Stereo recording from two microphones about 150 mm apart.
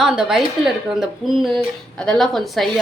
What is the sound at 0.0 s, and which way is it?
Speech, 5° right (ahead or behind).